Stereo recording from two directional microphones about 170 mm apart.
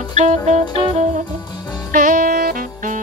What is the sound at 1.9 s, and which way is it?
Saxophone, 55° right (ahead or behind).